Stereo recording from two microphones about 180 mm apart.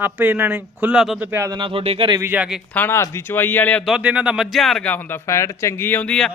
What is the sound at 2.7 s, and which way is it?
A man's voice, 15° left (ahead or behind).